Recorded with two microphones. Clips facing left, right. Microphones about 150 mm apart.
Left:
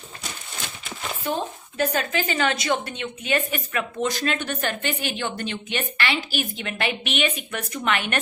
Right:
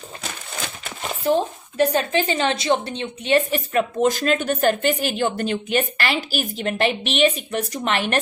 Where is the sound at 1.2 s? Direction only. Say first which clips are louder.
Right 8 dB; 35° right (ahead or behind).